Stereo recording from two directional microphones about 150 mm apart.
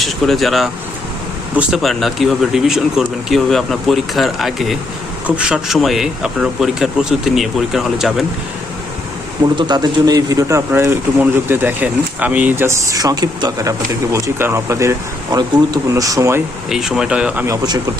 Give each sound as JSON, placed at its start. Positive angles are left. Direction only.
{"t": 0.0, "sound": "speech", "side_deg": 0}
{"t": 9.6, "sound": "speech", "side_deg": -30}
{"t": 10.7, "sound": "speech", "side_deg": -15}
{"t": 16.6, "sound": "speech", "side_deg": -5}
{"t": 17.4, "sound": "speech", "side_deg": -25}